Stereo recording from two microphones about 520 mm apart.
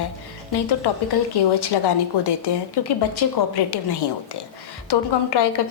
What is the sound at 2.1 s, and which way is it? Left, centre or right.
A woman's voice, left.